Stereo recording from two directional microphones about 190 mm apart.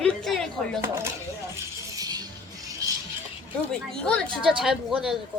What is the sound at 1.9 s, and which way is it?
Music, 20° right (ahead or behind).